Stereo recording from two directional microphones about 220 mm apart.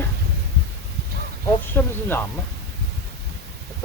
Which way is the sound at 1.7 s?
10° left (ahead or behind).